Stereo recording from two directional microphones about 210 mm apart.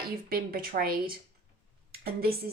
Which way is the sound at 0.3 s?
45° right (ahead or behind).